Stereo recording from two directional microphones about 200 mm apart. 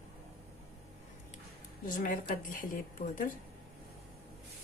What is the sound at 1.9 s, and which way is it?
A woman's voice, 45° left (ahead or behind).